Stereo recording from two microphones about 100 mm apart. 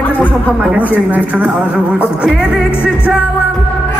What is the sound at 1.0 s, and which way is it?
Music, 15° right (ahead or behind).